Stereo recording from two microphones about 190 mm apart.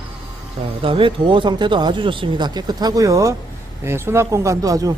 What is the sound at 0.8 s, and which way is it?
Speech, 30° right (ahead or behind).